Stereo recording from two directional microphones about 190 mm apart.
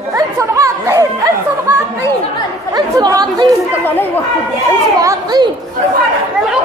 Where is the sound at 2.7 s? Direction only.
20° right (ahead or behind).